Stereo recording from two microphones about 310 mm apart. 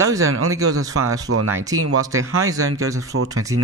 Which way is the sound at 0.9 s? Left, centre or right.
Right.